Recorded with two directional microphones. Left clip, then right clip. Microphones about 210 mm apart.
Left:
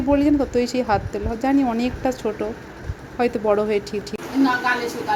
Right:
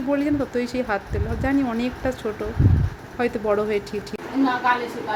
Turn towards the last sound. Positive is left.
turn(degrees=10)  # may be behind; listen again after turning